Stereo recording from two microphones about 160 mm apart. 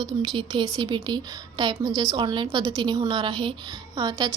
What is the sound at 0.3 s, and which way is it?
A woman's voice, 25° right (ahead or behind).